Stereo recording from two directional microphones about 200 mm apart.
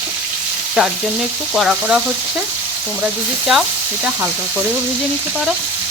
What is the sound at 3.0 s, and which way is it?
Frying, 5° right (ahead or behind).